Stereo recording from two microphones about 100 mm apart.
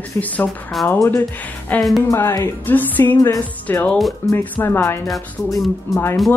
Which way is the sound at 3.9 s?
Centre (ahead or behind).